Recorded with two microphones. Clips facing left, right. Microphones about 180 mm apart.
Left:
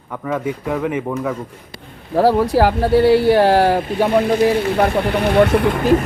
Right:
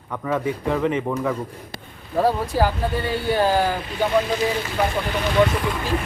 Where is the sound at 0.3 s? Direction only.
5° left (ahead or behind).